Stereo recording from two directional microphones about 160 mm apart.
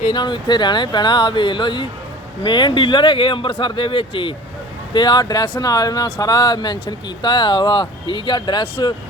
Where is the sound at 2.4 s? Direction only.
30° left (ahead or behind).